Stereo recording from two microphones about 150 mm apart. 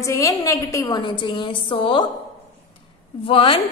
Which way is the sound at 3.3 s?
35° left (ahead or behind).